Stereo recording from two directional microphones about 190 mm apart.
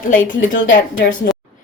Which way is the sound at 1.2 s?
55° left (ahead or behind).